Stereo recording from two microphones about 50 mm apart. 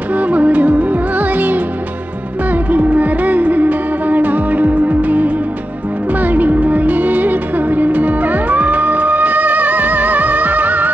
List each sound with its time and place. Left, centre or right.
0.1 s music: right
2.5 s music of bollywood: right
6.1 s music: right